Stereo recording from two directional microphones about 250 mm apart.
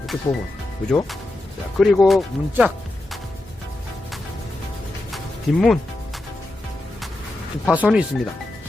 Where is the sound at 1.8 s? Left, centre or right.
Centre.